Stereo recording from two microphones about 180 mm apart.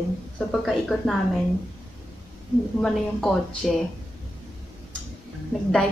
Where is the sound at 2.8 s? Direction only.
Centre (ahead or behind).